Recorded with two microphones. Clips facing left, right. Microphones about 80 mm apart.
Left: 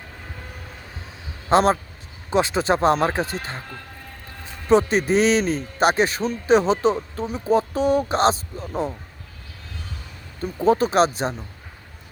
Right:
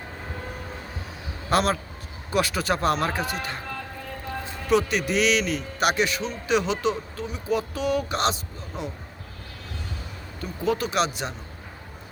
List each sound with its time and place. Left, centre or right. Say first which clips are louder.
1.5 s speech: left 6 dB; left
4.7 s a man's voice: left 5 dB; left
10.4 s a man's voice: left 7 dB; left